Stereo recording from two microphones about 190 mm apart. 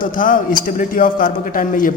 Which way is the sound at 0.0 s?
45° left (ahead or behind).